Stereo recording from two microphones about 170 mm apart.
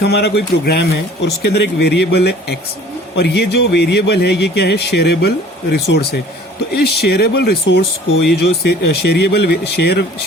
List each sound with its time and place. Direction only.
0.0 s speech: 75° left (ahead or behind)